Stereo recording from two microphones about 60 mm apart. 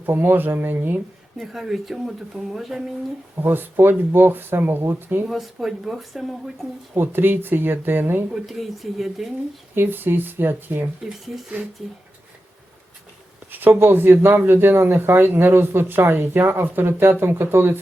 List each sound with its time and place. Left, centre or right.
0.0 s speech: right
1.4 s speech: centre
3.3 s speech: right
5.3 s speech: centre
6.9 s speech: right
8.3 s speech: centre
9.7 s speech: right
13.5 s speech: right